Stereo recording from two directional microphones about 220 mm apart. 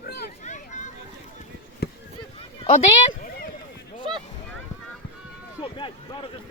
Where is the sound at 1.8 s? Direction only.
45° left (ahead or behind).